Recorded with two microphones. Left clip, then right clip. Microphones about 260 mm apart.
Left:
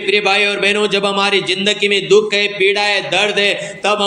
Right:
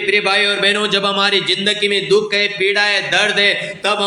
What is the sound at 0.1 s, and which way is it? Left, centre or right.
A man's voice, centre.